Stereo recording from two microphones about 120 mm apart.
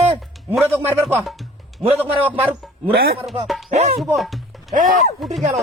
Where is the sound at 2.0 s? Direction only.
15° right (ahead or behind).